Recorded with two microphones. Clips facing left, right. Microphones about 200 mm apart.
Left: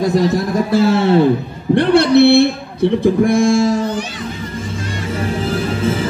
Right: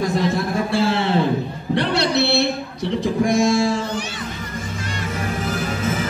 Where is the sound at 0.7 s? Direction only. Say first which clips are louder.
Left 9 dB; 45° left (ahead or behind).